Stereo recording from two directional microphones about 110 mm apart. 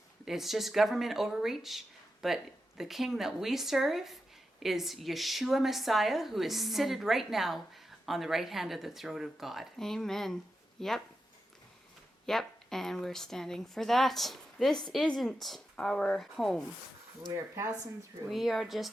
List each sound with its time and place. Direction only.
0.3 s a woman's voice: centre (ahead or behind)
12.2 s a woman's voice: centre (ahead or behind)
17.3 s speech: 30° right (ahead or behind)
18.3 s a woman's voice: centre (ahead or behind)